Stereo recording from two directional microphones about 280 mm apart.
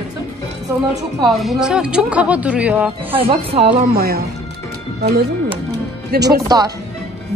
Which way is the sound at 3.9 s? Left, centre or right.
Right.